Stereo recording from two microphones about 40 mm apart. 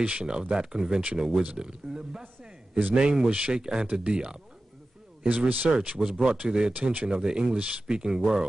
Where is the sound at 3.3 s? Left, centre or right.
Right.